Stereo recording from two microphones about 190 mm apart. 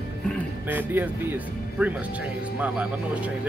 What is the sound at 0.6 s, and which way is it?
Speech, 10° right (ahead or behind).